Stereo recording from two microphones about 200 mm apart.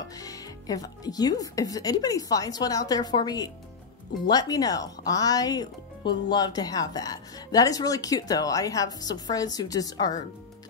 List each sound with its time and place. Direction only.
0.2 s speech: 20° left (ahead or behind)